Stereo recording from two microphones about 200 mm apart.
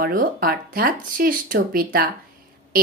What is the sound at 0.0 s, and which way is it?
A woman's voice, 45° right (ahead or behind).